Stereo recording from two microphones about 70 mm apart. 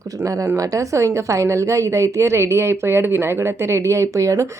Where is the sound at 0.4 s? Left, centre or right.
Right.